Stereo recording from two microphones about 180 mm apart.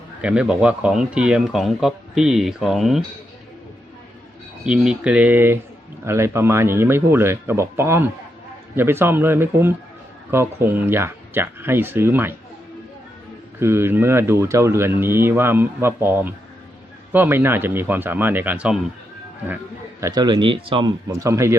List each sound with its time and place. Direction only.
0.2 s speech: 5° right (ahead or behind)
4.6 s speech: 5° right (ahead or behind)
13.6 s speech: 15° right (ahead or behind)
20.0 s speech: 20° right (ahead or behind)
21.1 s speech: 15° right (ahead or behind)